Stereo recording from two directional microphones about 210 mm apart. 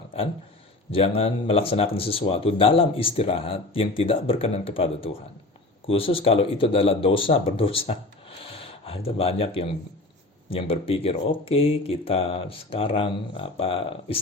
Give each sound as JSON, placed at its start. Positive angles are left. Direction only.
{"t": 0.9, "sound": "speech", "side_deg": 25}
{"t": 8.6, "sound": "a sound", "side_deg": 25}
{"t": 9.0, "sound": "speech", "side_deg": 30}